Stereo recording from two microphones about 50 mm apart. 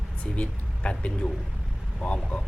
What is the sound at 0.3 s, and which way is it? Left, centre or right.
Speech, left.